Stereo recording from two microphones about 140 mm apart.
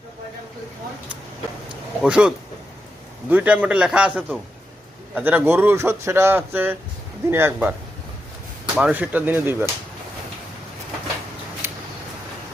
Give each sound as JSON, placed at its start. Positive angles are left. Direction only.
{"t": 2.0, "sound": "speech", "side_deg": -5}
{"t": 8.7, "sound": "speech", "side_deg": -10}
{"t": 11.6, "sound": "a sound", "side_deg": -20}